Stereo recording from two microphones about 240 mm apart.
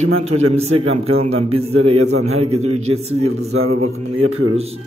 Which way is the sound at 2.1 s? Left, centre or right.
Right.